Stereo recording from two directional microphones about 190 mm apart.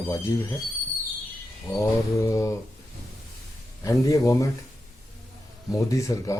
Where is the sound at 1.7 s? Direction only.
15° left (ahead or behind).